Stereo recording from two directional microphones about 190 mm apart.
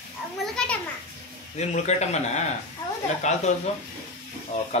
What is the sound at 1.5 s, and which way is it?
Speech, 35° left (ahead or behind).